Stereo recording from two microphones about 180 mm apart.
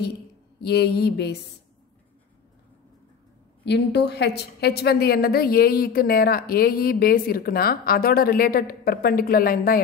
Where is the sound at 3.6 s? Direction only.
70° left (ahead or behind).